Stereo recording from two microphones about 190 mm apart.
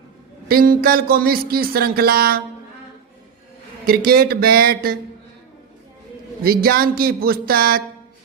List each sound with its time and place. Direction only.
0.4 s speech: 50° right (ahead or behind)
3.8 s speech: 50° right (ahead or behind)
6.4 s speech: 50° right (ahead or behind)